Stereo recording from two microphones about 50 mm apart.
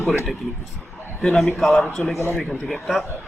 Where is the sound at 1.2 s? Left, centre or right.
Centre.